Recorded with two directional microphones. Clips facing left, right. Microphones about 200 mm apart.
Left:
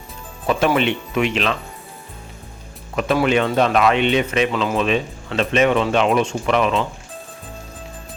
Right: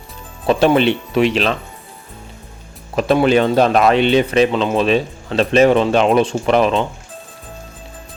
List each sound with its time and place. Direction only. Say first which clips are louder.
0.4 s speech: right 5 dB; 30° right (ahead or behind)
2.9 s speech: right 4 dB; 35° right (ahead or behind)